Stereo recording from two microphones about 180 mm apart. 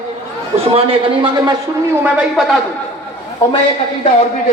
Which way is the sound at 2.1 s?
Centre (ahead or behind).